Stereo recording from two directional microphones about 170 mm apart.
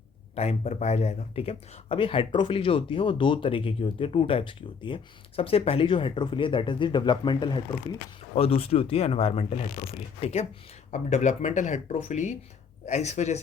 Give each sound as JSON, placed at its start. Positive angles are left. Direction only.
{"t": 0.3, "sound": "speech", "side_deg": 40}